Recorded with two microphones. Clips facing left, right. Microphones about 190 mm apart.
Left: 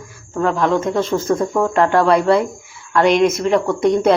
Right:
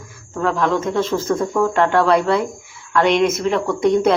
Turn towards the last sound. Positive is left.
turn(degrees=30)  # may be behind; listen again after turning